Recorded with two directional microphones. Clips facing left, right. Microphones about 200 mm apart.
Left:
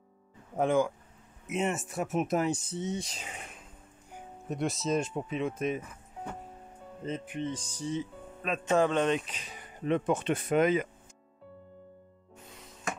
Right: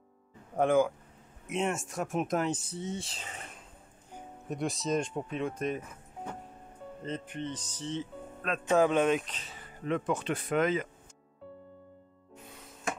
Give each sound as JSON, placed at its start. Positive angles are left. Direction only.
{"t": 0.6, "sound": "speech", "side_deg": 0}
{"t": 2.7, "sound": "speech", "side_deg": 20}
{"t": 4.5, "sound": "speech", "side_deg": 0}
{"t": 7.1, "sound": "speech", "side_deg": 10}
{"t": 9.2, "sound": "speech", "side_deg": 10}